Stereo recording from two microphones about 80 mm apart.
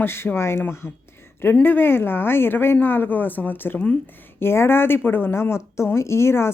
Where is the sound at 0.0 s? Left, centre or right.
Left.